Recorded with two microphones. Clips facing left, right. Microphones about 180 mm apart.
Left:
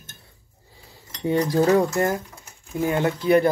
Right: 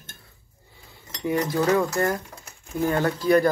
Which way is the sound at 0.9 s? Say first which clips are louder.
Left 2 dB; 30° left (ahead or behind).